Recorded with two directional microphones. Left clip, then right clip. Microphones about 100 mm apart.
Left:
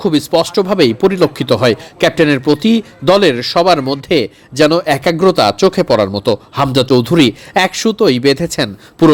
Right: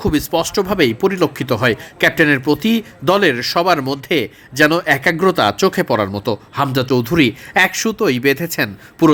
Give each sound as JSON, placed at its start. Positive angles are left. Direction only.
{"t": 0.0, "sound": "speech", "side_deg": 25}